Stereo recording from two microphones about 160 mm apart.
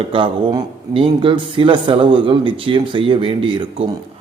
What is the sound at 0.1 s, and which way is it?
A man's voice, 35° right (ahead or behind).